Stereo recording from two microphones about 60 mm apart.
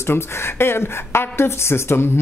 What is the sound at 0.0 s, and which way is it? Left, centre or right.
Speech, left.